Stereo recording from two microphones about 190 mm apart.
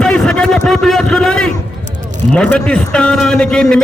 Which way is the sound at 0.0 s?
5° left (ahead or behind).